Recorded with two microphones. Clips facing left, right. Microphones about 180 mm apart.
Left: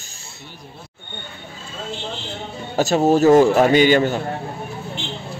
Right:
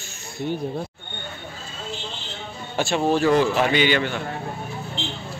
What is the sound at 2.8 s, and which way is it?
A man's voice, 40° left (ahead or behind).